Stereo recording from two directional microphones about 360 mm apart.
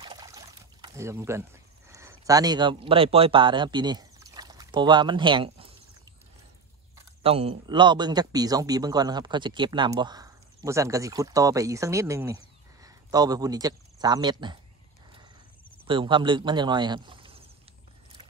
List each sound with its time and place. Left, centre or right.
0.0 s pour: centre
7.2 s speech: centre
15.9 s speech: centre